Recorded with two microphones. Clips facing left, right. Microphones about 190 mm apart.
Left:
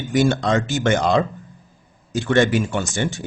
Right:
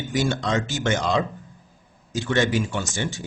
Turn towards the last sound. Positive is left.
turn(degrees=55)  # may be behind; listen again after turning